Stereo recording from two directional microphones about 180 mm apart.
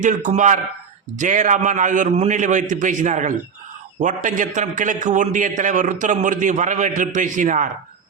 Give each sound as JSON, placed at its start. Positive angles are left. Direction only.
{"t": 0.0, "sound": "a man's voice", "side_deg": -45}